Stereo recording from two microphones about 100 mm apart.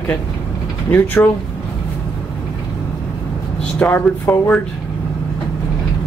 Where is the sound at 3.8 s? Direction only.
15° left (ahead or behind).